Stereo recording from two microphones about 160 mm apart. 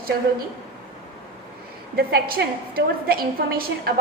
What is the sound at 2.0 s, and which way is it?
A woman's voice, 80° right.